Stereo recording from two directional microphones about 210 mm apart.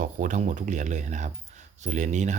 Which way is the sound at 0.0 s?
40° right (ahead or behind).